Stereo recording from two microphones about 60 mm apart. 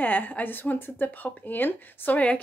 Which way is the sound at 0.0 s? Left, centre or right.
Left.